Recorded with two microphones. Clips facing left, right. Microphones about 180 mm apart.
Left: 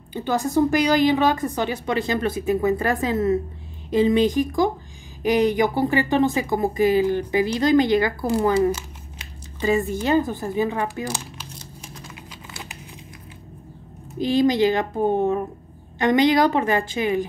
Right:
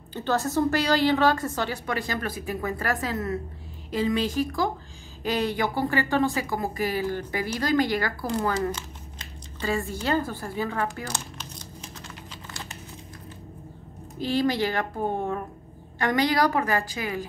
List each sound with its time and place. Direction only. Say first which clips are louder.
0.1 s a woman's voice: left 4 dB; 15° left (ahead or behind)
8.3 s speech: left 7 dB; 10° left (ahead or behind)
14.1 s speech: left 6 dB; 15° left (ahead or behind)